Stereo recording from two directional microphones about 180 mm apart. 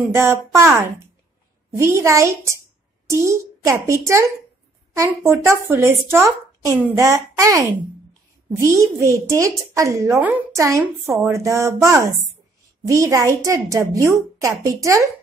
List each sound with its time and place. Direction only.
0.0 s speech: 15° right (ahead or behind)